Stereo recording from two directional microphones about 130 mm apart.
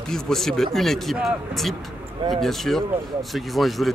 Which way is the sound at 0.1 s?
5° left (ahead or behind).